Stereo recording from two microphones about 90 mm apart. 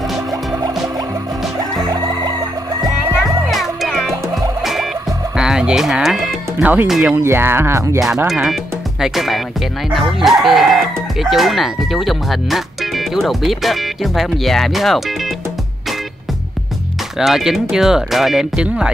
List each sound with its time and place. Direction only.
3.4 s music: centre (ahead or behind)
5.3 s music: 5° right (ahead or behind)
6.6 s speech: 20° right (ahead or behind)
7.2 s speech: 25° right (ahead or behind)
8.3 s speech: 5° right (ahead or behind)
17.2 s speech: 5° right (ahead or behind)